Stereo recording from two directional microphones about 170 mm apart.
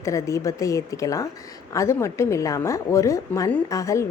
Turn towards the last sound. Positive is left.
turn(degrees=20)  # may be behind; listen again after turning